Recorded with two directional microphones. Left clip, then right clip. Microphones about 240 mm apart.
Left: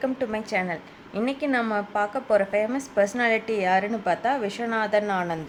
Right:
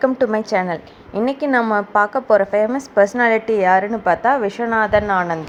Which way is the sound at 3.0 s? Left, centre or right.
Centre.